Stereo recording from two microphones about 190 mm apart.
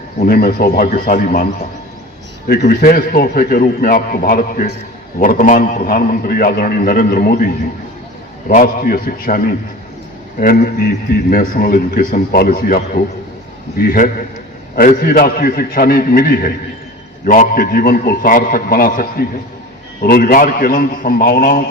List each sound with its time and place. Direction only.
0.2 s a man's voice: 50° left (ahead or behind)